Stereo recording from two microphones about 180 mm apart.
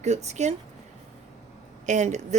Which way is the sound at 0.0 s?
40° right (ahead or behind).